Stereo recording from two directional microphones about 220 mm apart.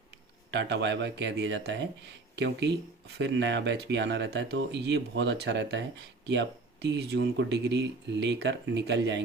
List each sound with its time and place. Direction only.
0.5 s speech: 50° right (ahead or behind)